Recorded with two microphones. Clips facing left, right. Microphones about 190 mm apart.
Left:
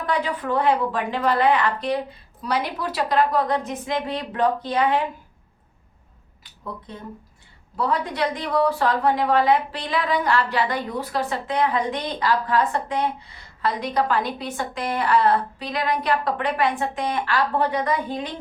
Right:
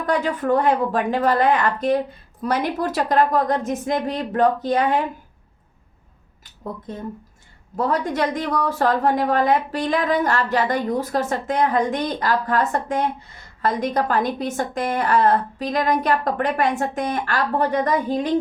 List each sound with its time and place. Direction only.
0.0 s a woman's voice: 45° right (ahead or behind)
6.4 s a woman's voice: 45° right (ahead or behind)